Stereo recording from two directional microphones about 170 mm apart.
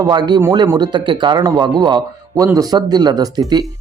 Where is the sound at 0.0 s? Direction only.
25° right (ahead or behind).